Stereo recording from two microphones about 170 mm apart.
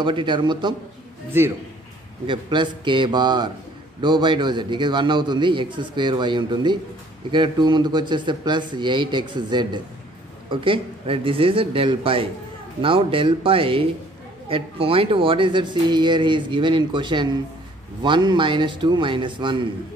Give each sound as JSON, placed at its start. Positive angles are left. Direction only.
{"t": 0.0, "sound": "speech", "side_deg": -30}
{"t": 1.3, "sound": "a man's voice", "side_deg": -15}
{"t": 2.2, "sound": "speech", "side_deg": -30}